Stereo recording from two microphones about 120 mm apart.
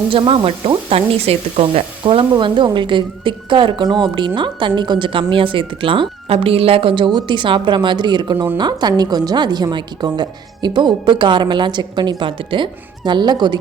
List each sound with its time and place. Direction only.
0.1 s speech: 50° right (ahead or behind)
2.3 s a woman's voice: 40° right (ahead or behind)